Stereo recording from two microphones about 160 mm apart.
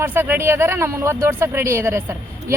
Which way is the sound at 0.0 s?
15° right (ahead or behind).